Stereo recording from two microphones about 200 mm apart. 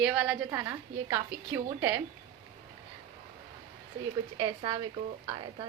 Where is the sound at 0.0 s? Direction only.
5° right (ahead or behind).